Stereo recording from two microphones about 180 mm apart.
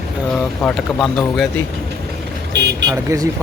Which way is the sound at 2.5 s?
75° right (ahead or behind).